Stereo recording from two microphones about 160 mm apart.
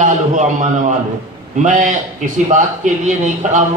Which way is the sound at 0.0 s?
50° right (ahead or behind).